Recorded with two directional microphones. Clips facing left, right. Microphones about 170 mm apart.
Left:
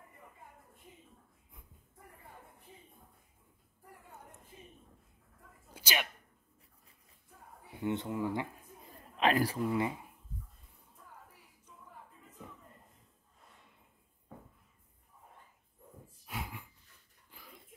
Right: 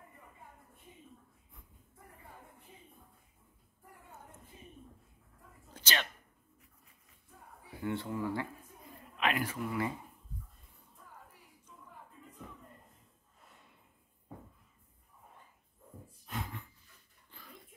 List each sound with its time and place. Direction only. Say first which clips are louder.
5.7 s sneeze: even; 10° left (ahead or behind)
7.8 s speech: left 2 dB; 20° left (ahead or behind)
9.1 s speech: left 4 dB; 35° left (ahead or behind)
16.3 s dog: right 1 dB; 10° left (ahead or behind)